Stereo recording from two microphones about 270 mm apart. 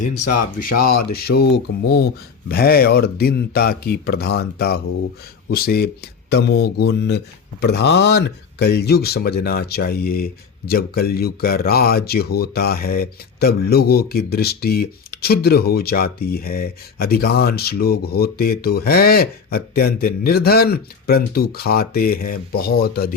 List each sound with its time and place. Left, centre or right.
0.0 s speech: left